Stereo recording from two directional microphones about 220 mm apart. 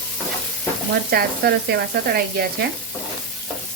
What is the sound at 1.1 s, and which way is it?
Speech, 45° right (ahead or behind).